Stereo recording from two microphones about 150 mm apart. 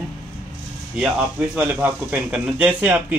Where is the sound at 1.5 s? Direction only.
10° right (ahead or behind).